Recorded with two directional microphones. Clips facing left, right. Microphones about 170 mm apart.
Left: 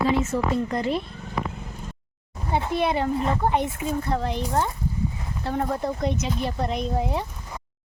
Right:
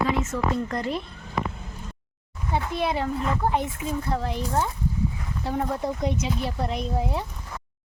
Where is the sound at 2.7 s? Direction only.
Centre (ahead or behind).